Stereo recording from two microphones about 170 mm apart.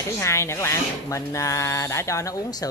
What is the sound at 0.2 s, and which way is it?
Speech, 15° left (ahead or behind).